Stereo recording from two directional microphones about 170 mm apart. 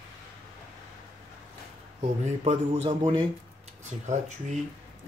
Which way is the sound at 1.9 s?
35° right (ahead or behind).